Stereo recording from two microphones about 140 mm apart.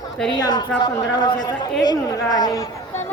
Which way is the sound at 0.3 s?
30° left (ahead or behind).